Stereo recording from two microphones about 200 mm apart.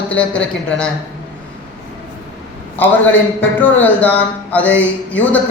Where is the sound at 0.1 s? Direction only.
5° left (ahead or behind).